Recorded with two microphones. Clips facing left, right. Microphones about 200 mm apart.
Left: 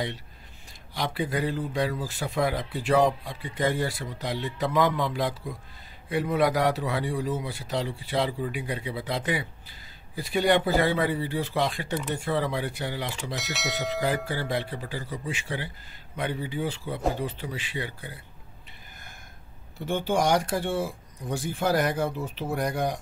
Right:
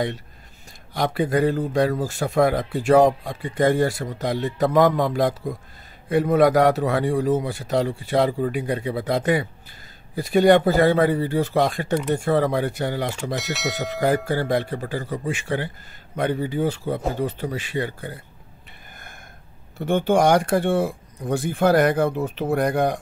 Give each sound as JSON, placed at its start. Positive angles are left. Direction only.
{"t": 0.9, "sound": "a man's voice", "side_deg": -50}
{"t": 13.4, "sound": "speech", "side_deg": 0}
{"t": 14.0, "sound": "a man's voice", "side_deg": -45}
{"t": 19.8, "sound": "speech", "side_deg": -55}